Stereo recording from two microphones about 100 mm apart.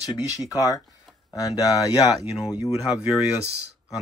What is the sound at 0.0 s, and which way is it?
Speech, 35° left (ahead or behind).